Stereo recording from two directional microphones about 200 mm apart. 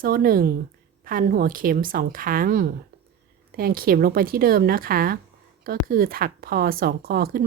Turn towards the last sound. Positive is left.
turn(degrees=-50)  # may be behind; listen again after turning